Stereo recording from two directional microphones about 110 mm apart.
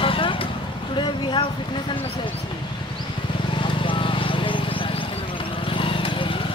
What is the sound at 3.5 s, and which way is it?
Vehicle, 50° left (ahead or behind).